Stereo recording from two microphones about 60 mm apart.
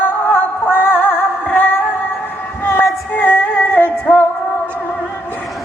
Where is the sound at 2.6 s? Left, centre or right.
Left.